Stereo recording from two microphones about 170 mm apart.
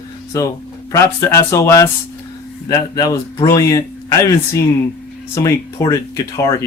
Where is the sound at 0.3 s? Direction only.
20° left (ahead or behind).